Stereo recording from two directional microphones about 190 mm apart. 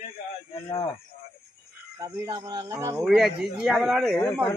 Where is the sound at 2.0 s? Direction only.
20° right (ahead or behind).